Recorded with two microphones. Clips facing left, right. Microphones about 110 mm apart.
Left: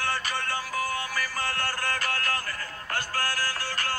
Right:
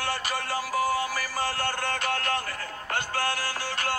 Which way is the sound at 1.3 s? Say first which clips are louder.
Right 3 dB; 30° right (ahead or behind).